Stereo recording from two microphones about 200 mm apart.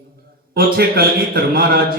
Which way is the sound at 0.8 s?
50° right (ahead or behind).